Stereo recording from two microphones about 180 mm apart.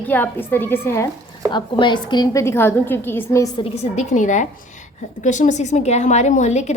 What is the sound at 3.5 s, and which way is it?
A woman's voice, 35° left (ahead or behind).